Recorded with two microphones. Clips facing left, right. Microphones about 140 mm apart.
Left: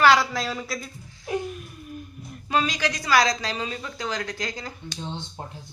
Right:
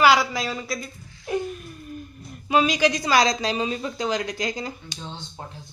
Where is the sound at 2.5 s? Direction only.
15° right (ahead or behind).